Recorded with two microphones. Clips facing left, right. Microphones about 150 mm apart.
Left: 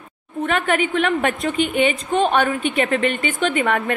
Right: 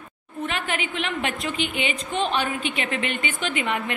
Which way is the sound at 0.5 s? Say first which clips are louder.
Left 10 dB; 50° left (ahead or behind).